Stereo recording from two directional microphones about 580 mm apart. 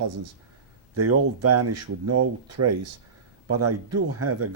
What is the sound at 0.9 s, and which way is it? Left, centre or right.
Speech, right.